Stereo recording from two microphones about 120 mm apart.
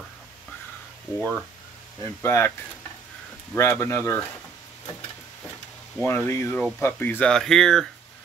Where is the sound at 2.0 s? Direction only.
20° left (ahead or behind).